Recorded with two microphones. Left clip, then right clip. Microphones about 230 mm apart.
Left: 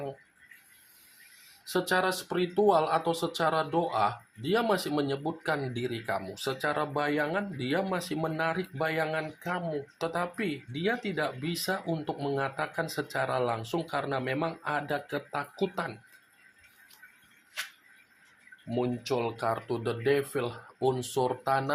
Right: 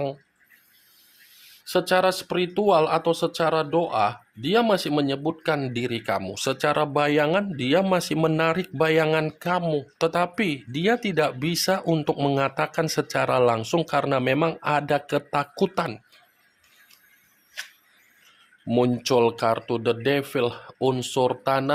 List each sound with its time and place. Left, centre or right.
1.6 s speech: right
18.7 s speech: right